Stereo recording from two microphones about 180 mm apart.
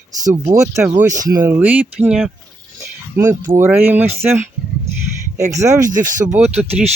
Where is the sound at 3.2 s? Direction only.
20° right (ahead or behind).